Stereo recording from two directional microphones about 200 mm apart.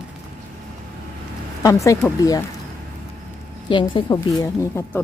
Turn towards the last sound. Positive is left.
turn(degrees=15)  # may be behind; listen again after turning